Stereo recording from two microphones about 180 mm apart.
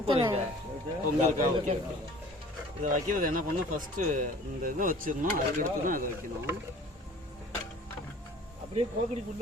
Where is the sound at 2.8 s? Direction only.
45° right (ahead or behind).